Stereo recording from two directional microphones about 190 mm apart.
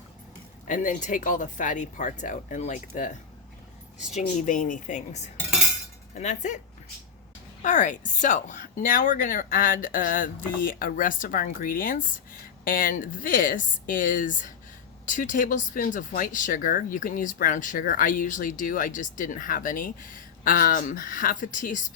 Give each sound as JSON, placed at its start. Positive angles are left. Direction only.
{"t": 0.7, "sound": "speech", "side_deg": 45}
{"t": 7.6, "sound": "speech", "side_deg": 40}